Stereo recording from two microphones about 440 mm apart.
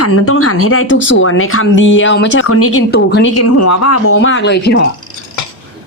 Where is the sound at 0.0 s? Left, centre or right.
Left.